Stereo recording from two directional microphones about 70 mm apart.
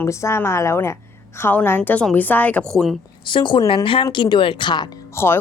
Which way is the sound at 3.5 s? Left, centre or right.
Left.